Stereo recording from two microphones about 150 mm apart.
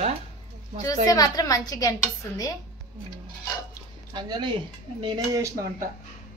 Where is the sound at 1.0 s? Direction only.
25° left (ahead or behind).